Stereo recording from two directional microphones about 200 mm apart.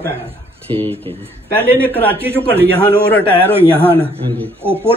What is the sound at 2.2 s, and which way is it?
Speech, 10° right (ahead or behind).